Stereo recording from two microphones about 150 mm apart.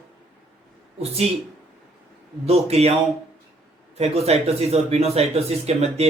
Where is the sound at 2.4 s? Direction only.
45° right (ahead or behind).